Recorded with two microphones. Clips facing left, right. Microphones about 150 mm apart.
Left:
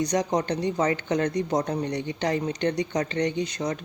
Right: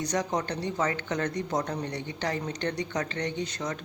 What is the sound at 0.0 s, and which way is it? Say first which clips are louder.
Speech: left 5 dB; 20° left (ahead or behind).